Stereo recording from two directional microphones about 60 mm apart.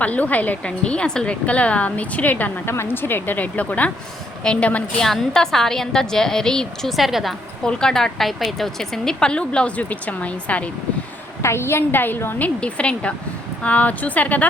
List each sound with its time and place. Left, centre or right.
0.0 s a woman's voice: left
2.6 s a woman's voice: left
4.9 s a woman's voice: centre
7.6 s a woman's voice: centre
11.4 s a woman's voice: left
12.4 s a woman's voice: centre